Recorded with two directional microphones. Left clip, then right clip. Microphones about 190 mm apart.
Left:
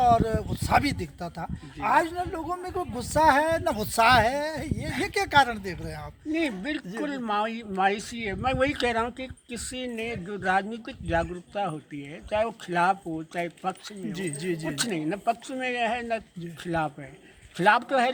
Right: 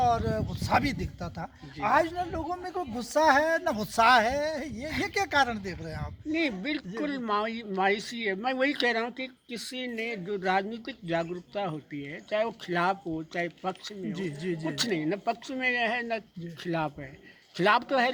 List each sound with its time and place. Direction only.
0.0 s speech: 30° left (ahead or behind)
6.3 s speech: 10° right (ahead or behind)
14.1 s speech: 55° left (ahead or behind)
14.7 s speech: 10° right (ahead or behind)